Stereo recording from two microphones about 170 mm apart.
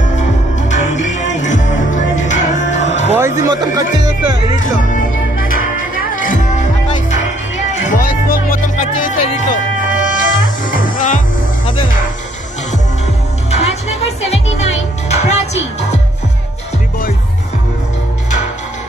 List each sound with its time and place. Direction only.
0.6 s music: 45° left (ahead or behind)
3.1 s a sound: 15° right (ahead or behind)
3.4 s speech: 25° right (ahead or behind)
6.1 s music: 50° left (ahead or behind)
9.8 s music: 90° left
10.7 s music: 50° left (ahead or behind)
13.5 s music: 40° left (ahead or behind)